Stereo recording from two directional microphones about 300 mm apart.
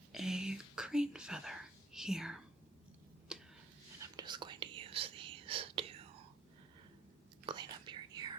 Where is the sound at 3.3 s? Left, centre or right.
Centre.